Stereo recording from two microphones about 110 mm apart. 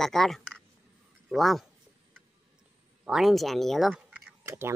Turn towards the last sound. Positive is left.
turn(degrees=-20)  # may be behind; listen again after turning